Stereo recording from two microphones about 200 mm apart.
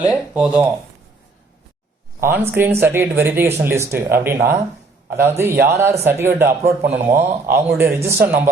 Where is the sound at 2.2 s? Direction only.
10° right (ahead or behind).